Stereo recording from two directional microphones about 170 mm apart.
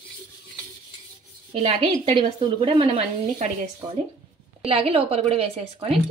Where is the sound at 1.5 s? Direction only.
35° right (ahead or behind).